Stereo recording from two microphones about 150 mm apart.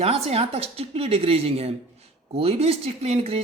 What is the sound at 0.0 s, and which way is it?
A woman's voice, 40° right (ahead or behind).